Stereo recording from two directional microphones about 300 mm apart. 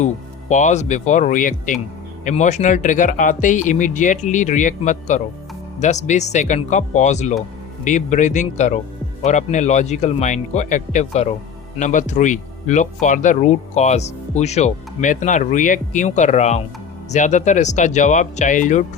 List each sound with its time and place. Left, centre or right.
0.0 s speech: left